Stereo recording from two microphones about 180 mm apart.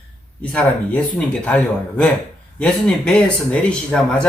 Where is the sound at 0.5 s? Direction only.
5° left (ahead or behind).